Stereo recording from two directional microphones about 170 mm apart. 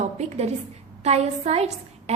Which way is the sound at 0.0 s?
40° right (ahead or behind).